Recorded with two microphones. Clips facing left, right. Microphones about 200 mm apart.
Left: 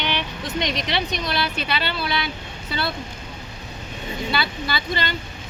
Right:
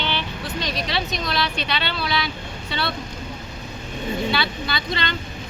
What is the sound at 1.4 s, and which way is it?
Speech, 5° left (ahead or behind).